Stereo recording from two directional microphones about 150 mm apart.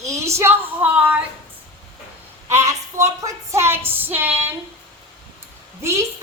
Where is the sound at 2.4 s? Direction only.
20° right (ahead or behind).